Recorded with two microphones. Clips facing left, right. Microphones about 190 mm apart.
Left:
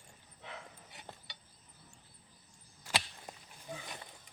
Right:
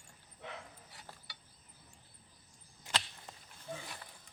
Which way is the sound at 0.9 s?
20° left (ahead or behind).